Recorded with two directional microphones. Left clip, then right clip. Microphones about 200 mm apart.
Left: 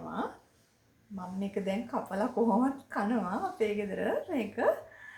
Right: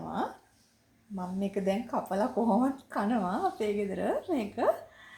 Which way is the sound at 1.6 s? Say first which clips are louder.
Right 5 dB; 25° right (ahead or behind).